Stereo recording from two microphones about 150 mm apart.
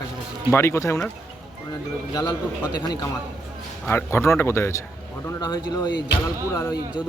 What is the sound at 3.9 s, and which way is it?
A man's voice, 15° left (ahead or behind).